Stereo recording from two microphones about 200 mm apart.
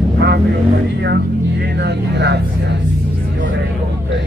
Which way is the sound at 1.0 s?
55° right (ahead or behind).